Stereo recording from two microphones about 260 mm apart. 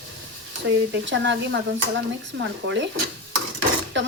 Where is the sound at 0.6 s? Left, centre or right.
Right.